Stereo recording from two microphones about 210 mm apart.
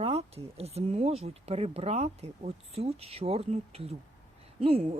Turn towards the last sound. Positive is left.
turn(degrees=-25)  # may be behind; listen again after turning